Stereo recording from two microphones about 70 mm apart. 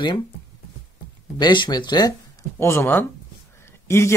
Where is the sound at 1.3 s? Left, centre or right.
Left.